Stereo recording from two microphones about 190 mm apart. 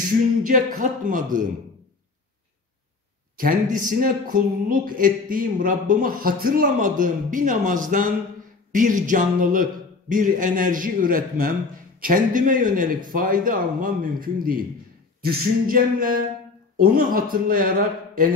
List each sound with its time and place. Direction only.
0.4 s speech: 45° right (ahead or behind)
3.3 s speech: 45° right (ahead or behind)